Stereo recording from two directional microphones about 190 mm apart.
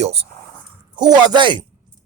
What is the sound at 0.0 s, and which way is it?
Speech, 30° right (ahead or behind).